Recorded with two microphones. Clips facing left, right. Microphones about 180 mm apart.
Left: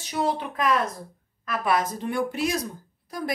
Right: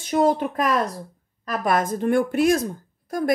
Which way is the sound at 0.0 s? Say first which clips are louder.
Right 7 dB; 45° right (ahead or behind).